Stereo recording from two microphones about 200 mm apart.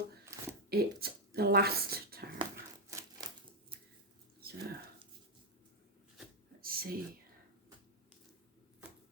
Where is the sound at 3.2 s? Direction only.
20° right (ahead or behind).